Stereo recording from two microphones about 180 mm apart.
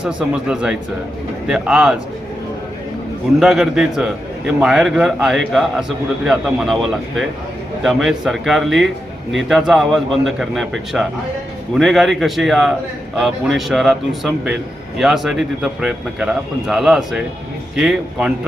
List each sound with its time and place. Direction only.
0.0 s a man's voice: 5° right (ahead or behind)
3.4 s a man's voice: 5° right (ahead or behind)